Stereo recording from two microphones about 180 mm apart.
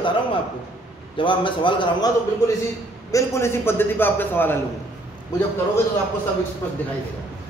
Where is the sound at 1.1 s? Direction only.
25° left (ahead or behind); by 4.6 s 10° left (ahead or behind).